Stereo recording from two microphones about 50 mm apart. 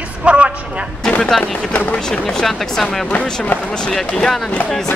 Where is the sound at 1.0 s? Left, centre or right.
Centre.